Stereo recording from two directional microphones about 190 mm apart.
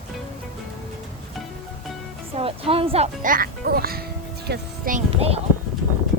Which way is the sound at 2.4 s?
30° right (ahead or behind).